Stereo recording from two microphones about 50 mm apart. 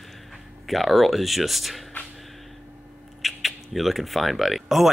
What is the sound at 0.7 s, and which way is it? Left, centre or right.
Speech, centre.